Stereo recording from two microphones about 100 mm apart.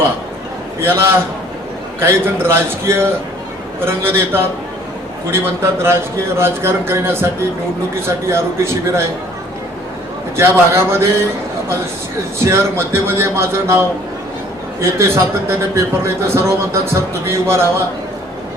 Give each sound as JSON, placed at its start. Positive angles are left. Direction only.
{"t": 0.8, "sound": "a man's voice", "side_deg": -25}
{"t": 5.8, "sound": "a man's voice", "side_deg": -25}
{"t": 10.3, "sound": "a man's voice", "side_deg": -25}
{"t": 12.5, "sound": "a man's voice", "side_deg": -25}